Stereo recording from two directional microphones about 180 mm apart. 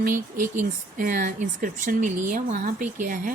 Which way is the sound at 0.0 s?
50° right (ahead or behind).